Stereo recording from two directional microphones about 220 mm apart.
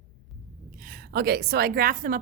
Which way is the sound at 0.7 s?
40° right (ahead or behind).